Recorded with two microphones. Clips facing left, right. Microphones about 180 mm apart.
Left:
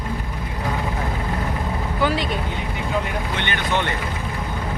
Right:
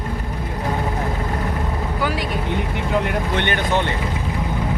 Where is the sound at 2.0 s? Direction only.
10° right (ahead or behind).